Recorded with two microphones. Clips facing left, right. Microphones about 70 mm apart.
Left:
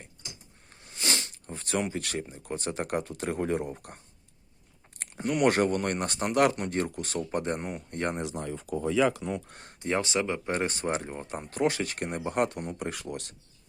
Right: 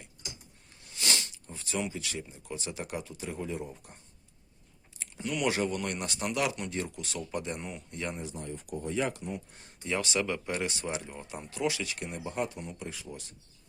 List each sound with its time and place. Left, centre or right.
0.7 s a sound: left
2.2 s speech: left
4.9 s speech: left
8.2 s speech: left
9.2 s speech: left
9.8 s speech: left